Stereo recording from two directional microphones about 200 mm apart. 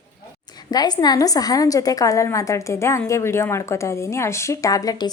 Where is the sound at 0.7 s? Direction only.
20° left (ahead or behind).